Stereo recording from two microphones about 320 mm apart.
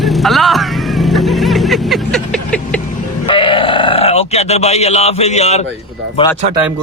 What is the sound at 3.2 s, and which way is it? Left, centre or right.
Speech, centre.